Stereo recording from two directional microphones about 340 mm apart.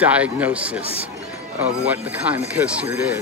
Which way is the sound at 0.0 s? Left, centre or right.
Centre.